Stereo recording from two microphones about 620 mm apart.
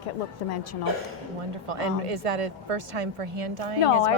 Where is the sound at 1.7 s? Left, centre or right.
Right.